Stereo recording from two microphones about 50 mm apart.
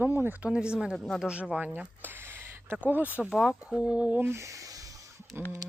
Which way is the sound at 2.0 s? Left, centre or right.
Right.